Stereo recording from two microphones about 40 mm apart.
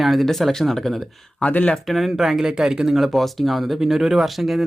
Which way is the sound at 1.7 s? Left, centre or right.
Centre.